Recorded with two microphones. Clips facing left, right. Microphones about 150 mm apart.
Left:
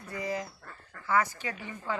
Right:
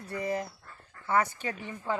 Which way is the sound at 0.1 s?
55° right (ahead or behind).